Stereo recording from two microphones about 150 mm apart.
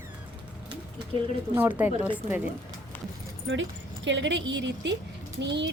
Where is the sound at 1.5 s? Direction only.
15° right (ahead or behind).